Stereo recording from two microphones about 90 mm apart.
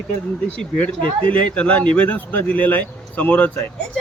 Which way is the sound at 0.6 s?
15° left (ahead or behind).